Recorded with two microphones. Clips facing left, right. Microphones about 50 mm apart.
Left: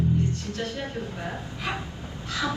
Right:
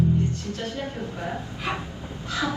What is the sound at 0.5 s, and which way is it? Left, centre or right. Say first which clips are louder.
Speech: even; right.